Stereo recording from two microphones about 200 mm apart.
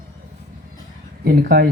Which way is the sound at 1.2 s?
50° right (ahead or behind).